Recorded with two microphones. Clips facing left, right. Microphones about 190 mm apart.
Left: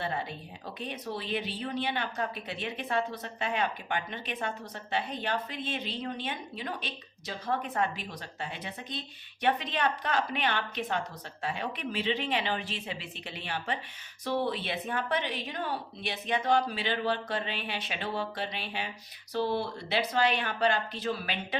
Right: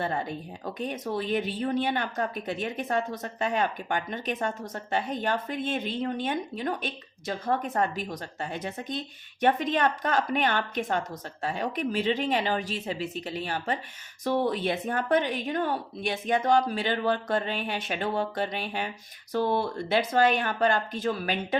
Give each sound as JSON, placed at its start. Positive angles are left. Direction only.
{"t": 0.0, "sound": "speech", "side_deg": -45}